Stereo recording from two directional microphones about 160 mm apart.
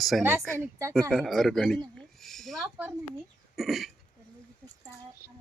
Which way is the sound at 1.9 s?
Centre (ahead or behind).